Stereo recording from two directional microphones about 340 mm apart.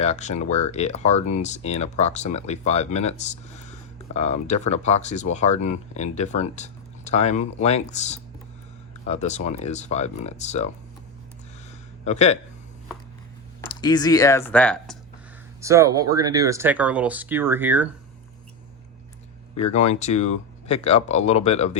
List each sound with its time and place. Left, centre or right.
0.0 s speech: centre
12.0 s speech: centre
13.8 s speech: centre
15.6 s speech: centre
19.6 s speech: centre